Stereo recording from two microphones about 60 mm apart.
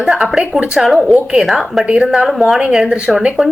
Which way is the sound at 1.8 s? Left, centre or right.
Centre.